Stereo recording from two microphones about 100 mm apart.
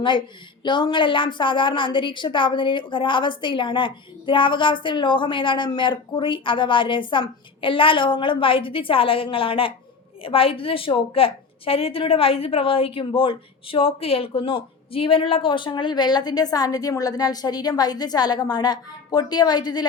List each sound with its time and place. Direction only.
0.6 s a woman's voice: 50° left (ahead or behind)